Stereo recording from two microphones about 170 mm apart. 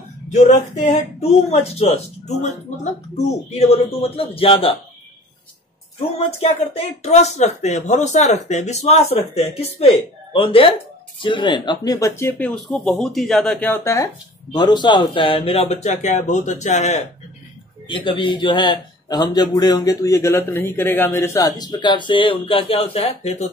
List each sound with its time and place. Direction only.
1.3 s speech: 40° left (ahead or behind)
6.1 s speech: 40° left (ahead or behind)
17.8 s speech: 30° left (ahead or behind)